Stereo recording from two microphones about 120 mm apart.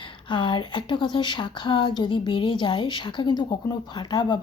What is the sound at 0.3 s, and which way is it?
Speech, 40° left (ahead or behind).